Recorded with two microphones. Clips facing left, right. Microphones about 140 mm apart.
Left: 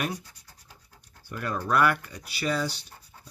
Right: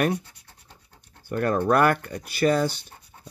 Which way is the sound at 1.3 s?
55° right (ahead or behind).